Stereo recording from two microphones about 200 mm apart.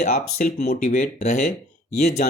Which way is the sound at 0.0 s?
40° left (ahead or behind).